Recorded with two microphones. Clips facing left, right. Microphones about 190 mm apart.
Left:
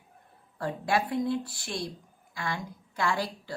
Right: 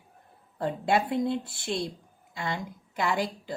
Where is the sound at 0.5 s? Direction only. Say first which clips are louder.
Right 2 dB; 25° right (ahead or behind).